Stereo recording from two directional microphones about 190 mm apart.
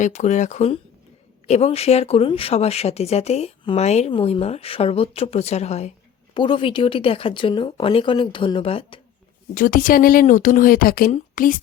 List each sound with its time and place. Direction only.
0.0 s speech: 40° left (ahead or behind)
9.6 s speech: 45° left (ahead or behind)